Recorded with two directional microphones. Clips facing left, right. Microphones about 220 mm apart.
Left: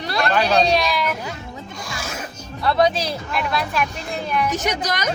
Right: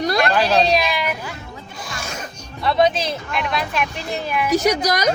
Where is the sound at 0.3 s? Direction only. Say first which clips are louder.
Left 3 dB; 5° right (ahead or behind).